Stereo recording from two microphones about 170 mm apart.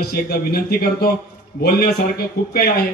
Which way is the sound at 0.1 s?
65° left (ahead or behind).